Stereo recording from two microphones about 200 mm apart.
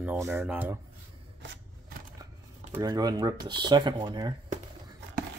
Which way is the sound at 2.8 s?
20° right (ahead or behind).